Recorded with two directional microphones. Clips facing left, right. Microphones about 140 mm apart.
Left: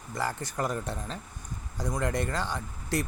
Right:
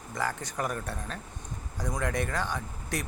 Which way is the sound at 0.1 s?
10° left (ahead or behind).